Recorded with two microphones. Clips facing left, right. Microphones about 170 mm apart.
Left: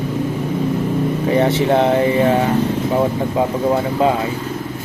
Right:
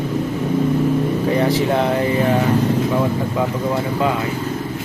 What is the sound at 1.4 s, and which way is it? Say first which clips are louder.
Speech: left 4 dB; 25° left (ahead or behind).